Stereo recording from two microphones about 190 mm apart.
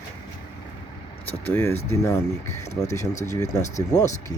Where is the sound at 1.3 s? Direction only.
10° left (ahead or behind).